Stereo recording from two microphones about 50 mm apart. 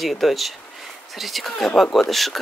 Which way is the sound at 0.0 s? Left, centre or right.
Centre.